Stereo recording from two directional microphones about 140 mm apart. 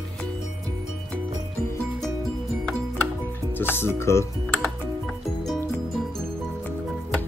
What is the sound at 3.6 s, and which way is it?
Speech, 15° left (ahead or behind).